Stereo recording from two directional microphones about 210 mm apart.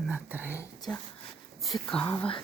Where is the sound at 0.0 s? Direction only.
5° right (ahead or behind).